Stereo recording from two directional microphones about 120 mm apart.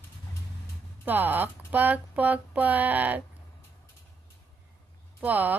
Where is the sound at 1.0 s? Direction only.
15° right (ahead or behind).